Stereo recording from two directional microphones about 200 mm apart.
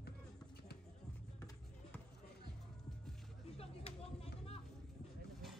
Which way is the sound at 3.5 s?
30° left (ahead or behind).